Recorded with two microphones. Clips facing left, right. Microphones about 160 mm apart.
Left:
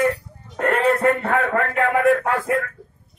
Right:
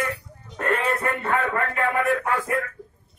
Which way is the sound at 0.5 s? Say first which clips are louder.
Left 6 dB; 75° left (ahead or behind).